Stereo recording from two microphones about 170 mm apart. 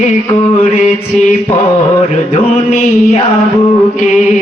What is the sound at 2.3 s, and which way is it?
Music, 35° left (ahead or behind).